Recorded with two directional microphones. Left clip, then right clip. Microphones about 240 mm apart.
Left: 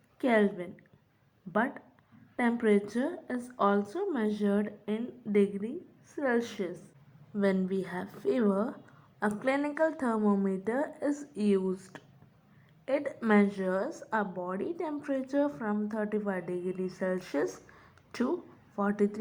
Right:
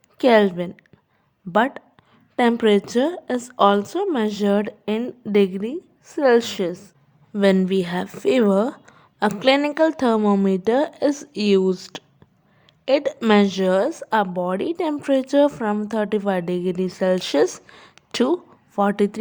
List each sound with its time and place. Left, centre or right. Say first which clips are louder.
0.2 s a woman's voice: right 12 dB; right
9.6 s a woman's voice: right 10 dB; right
10.0 s a woman's voice: right 11 dB; right
10.4 s a woman's voice: right 13 dB; right
13.1 s a woman's voice: right 10 dB; right
16.2 s a woman's voice: right 12 dB; right
18.9 s speech: right 9 dB; right